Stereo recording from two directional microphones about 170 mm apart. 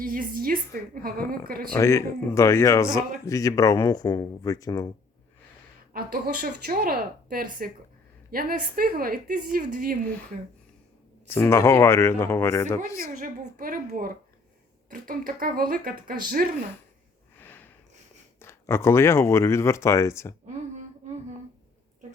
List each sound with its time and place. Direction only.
0.0 s a woman's voice: 55° right (ahead or behind)
1.7 s speech: 15° left (ahead or behind)
5.9 s a woman's voice: 60° right (ahead or behind)
11.3 s speech: 15° left (ahead or behind)
13.1 s a woman's voice: 55° right (ahead or behind)
17.4 s a sound: 10° left (ahead or behind)
18.3 s speech: 15° left (ahead or behind)